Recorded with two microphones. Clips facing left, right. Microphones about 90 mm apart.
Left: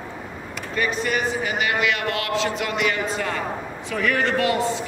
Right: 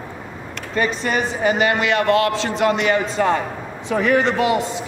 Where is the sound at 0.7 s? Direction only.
30° right (ahead or behind).